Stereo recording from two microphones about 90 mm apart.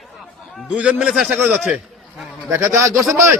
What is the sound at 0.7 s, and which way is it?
Speech, 10° right (ahead or behind).